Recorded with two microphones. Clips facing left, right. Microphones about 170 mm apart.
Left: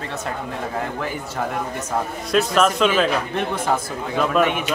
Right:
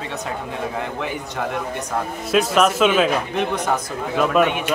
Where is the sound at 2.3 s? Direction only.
5° right (ahead or behind).